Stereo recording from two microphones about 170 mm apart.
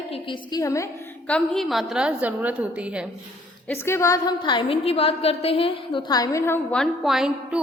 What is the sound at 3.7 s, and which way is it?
A woman's voice, 15° left (ahead or behind).